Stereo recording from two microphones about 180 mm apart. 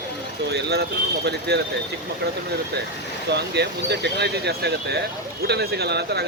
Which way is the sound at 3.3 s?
65° right (ahead or behind).